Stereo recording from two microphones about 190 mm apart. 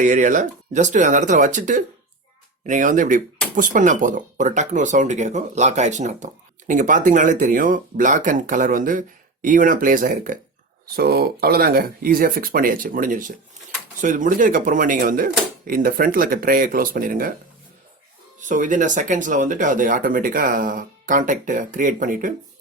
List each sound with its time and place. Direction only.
0.0 s speech: 45° right (ahead or behind)
10.9 s speech: 55° right (ahead or behind)
18.3 s speech: 40° right (ahead or behind)